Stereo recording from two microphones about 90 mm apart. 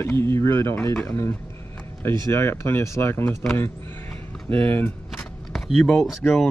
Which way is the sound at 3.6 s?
25° left (ahead or behind).